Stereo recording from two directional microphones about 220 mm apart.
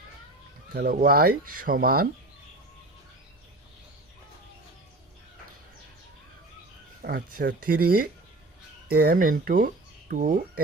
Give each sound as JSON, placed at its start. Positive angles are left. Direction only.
{"t": 0.7, "sound": "speech", "side_deg": -40}
{"t": 7.0, "sound": "speech", "side_deg": -40}